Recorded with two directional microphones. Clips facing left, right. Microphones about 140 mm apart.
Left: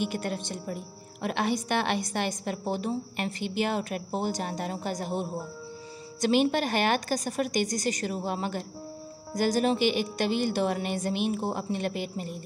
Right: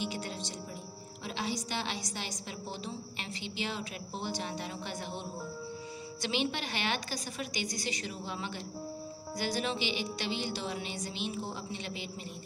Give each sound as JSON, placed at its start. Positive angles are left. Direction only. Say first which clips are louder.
{"t": 0.0, "sound": "a woman's voice", "louder": "left 7 dB", "side_deg": 55}